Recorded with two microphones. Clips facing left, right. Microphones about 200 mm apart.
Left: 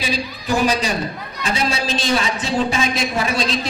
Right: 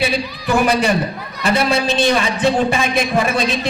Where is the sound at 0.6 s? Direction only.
60° right (ahead or behind).